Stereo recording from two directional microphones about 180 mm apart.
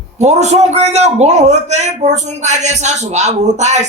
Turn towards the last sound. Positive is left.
turn(degrees=-40)  # may be behind; listen again after turning